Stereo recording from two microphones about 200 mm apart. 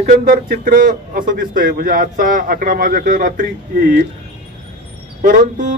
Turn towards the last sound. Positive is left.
turn(degrees=-40)  # may be behind; listen again after turning